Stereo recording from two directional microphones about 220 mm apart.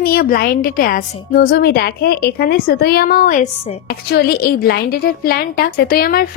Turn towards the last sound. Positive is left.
turn(degrees=40)  # may be behind; listen again after turning